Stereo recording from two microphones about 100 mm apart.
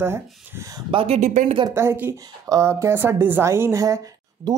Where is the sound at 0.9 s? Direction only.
75° right (ahead or behind).